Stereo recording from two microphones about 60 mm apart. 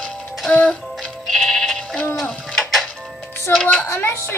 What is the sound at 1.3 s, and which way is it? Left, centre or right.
Sheep, centre.